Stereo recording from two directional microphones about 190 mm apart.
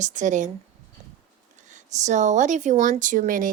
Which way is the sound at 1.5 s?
40° right (ahead or behind).